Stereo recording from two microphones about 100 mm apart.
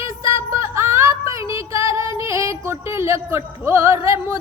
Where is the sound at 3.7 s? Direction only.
30° right (ahead or behind).